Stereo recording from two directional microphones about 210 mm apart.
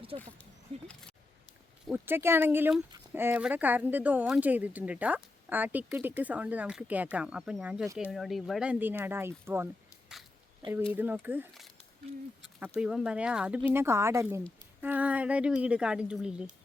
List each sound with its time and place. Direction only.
0.1 s speech: 25° right (ahead or behind)
1.9 s speech: 10° right (ahead or behind)